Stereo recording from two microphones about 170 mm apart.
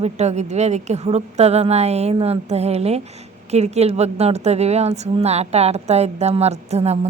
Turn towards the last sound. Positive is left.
turn(degrees=-40)  # may be behind; listen again after turning